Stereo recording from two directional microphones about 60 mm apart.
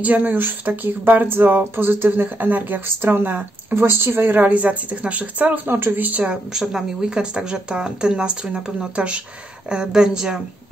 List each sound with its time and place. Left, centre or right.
0.0 s speech: right
5.7 s speech: right
6.5 s speech: centre